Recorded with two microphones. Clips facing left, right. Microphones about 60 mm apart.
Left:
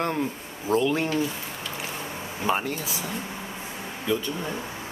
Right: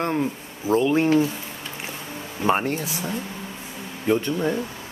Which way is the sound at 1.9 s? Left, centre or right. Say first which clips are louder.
Left 1 dB; centre.